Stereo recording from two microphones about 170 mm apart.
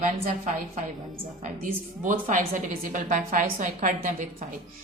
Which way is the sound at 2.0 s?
50° right (ahead or behind).